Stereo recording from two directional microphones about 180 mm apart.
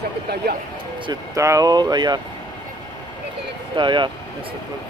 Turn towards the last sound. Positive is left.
turn(degrees=-25)  # may be behind; listen again after turning